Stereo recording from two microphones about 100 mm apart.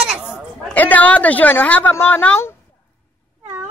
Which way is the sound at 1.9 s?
15° left (ahead or behind).